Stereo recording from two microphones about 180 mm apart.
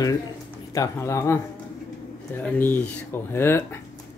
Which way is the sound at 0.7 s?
15° left (ahead or behind).